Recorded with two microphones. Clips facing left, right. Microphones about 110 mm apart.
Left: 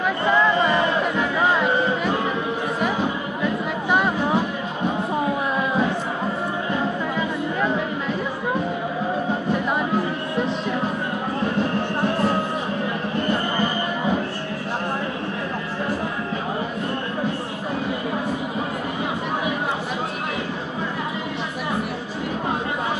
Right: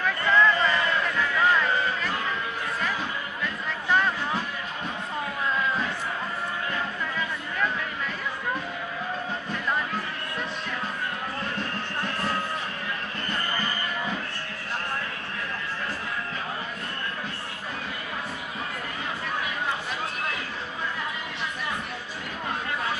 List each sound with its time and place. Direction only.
0.0 s crowd: 20° left (ahead or behind)
3.0 s a sound: 15° left (ahead or behind)
6.7 s music: 20° left (ahead or behind)